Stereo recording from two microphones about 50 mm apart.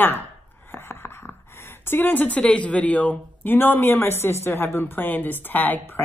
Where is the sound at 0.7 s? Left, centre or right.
Left.